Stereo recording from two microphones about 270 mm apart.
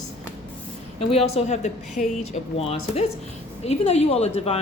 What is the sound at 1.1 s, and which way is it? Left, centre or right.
Speech, left.